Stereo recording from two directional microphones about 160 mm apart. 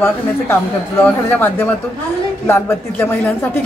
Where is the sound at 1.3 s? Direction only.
15° left (ahead or behind).